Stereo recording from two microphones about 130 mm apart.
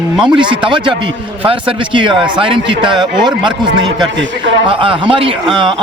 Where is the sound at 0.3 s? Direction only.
40° right (ahead or behind).